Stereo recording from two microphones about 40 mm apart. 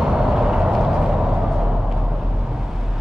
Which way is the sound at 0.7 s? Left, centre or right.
Centre.